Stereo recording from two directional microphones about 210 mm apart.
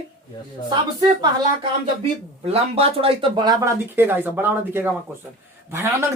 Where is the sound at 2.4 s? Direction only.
30° right (ahead or behind).